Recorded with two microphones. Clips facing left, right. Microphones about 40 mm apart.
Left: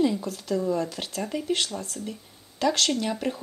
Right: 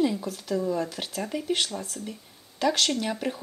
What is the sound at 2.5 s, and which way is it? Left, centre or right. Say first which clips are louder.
Speech: left 1 dB; centre.